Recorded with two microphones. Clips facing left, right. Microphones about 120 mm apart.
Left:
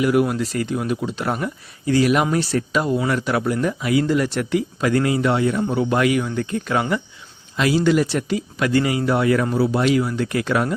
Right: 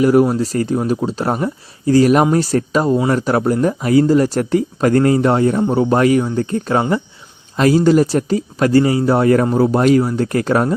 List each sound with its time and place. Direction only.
0.0 s speech: 40° right (ahead or behind)